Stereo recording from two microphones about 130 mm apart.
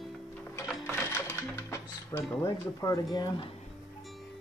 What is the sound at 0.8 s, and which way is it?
Music, 20° left (ahead or behind).